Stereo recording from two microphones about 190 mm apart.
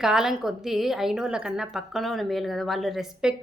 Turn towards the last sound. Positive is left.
turn(degrees=0)  # may be behind; listen again after turning